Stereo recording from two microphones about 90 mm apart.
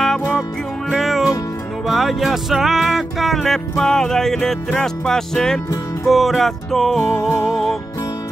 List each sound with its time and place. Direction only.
0.8 s music: centre (ahead or behind)